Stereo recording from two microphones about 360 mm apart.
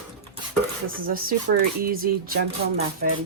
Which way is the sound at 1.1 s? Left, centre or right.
Right.